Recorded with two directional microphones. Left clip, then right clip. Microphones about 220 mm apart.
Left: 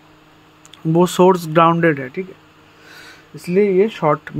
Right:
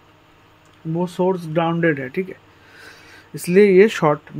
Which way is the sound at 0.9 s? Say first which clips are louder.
Left 8 dB; 30° left (ahead or behind).